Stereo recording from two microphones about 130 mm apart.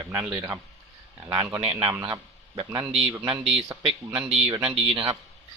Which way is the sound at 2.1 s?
25° right (ahead or behind).